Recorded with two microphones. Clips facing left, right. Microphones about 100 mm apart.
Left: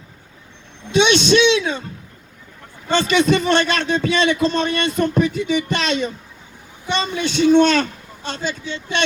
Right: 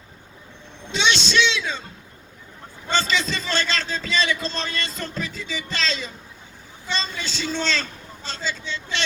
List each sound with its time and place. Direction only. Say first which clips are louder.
0.9 s a man's voice: left 9 dB; 55° left (ahead or behind)
2.9 s a man's voice: left 8 dB; 65° left (ahead or behind)